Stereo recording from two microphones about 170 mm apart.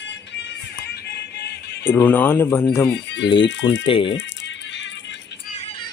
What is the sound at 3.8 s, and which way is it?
Speech, 30° left (ahead or behind).